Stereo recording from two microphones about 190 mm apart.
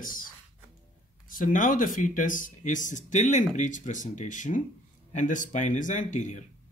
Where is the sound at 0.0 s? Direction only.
45° left (ahead or behind).